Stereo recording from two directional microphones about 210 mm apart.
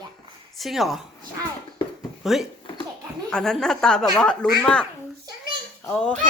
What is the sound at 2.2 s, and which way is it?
Speech, centre (ahead or behind).